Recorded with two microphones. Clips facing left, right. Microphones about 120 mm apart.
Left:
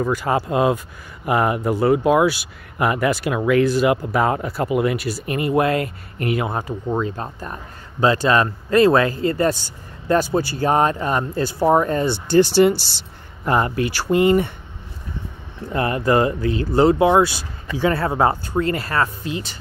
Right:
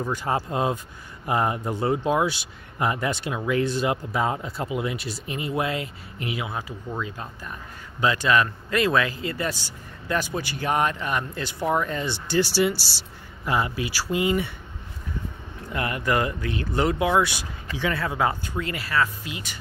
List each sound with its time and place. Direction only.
0.0 s speech: 90° left; by 10.2 s 45° left (ahead or behind)
10.6 s speech: 35° left (ahead or behind)
15.7 s speech: 35° left (ahead or behind)